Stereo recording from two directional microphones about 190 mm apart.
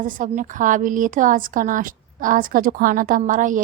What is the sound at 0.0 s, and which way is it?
A woman's voice, 45° right (ahead or behind).